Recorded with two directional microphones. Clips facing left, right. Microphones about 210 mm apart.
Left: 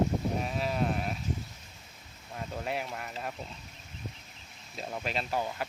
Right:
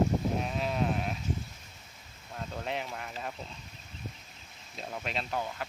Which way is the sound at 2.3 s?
5° left (ahead or behind).